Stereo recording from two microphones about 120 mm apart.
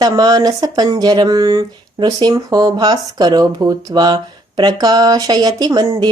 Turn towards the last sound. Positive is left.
turn(degrees=-35)  # may be behind; listen again after turning